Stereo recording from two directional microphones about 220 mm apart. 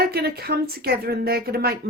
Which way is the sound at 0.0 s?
45° right (ahead or behind).